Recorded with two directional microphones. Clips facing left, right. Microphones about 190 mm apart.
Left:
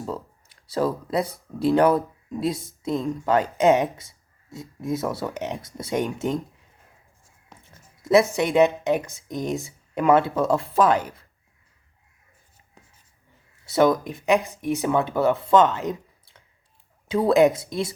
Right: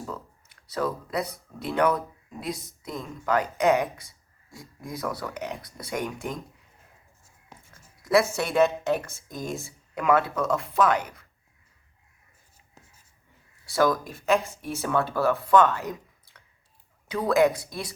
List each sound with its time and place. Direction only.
0.0 s speech: 30° left (ahead or behind)
7.7 s speech: 25° left (ahead or behind)
13.7 s speech: 20° left (ahead or behind)